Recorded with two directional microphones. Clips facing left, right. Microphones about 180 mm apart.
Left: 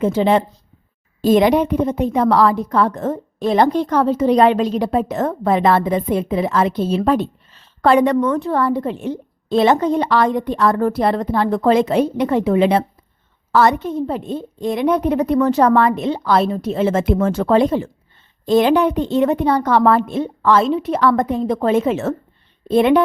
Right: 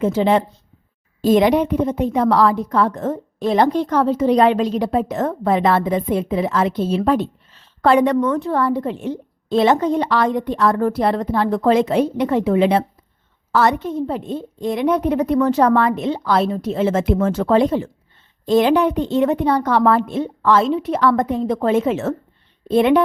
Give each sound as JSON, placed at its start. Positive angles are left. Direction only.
{"t": 0.0, "sound": "speech", "side_deg": 25}
{"t": 1.2, "sound": "a woman's voice", "side_deg": 45}